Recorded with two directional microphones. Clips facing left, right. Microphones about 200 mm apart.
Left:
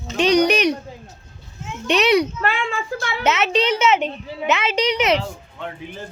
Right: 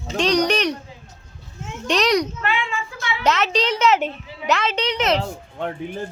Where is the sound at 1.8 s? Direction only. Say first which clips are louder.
Left 2 dB; 5° left (ahead or behind).